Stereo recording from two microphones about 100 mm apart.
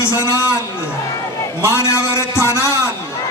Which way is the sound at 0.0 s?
30° left (ahead or behind).